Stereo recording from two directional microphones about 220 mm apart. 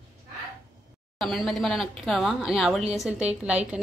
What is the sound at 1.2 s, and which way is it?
A woman's voice, centre (ahead or behind).